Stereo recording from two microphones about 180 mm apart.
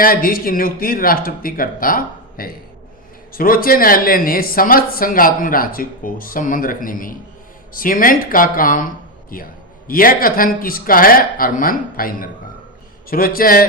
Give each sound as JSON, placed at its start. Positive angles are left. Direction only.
{"t": 0.0, "sound": "a man's voice", "side_deg": 55}